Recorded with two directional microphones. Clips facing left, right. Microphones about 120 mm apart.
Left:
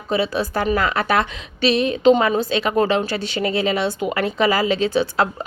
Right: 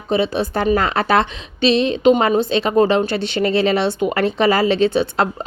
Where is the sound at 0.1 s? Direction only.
25° right (ahead or behind).